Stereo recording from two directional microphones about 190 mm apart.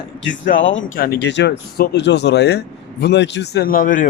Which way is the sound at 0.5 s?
85° left.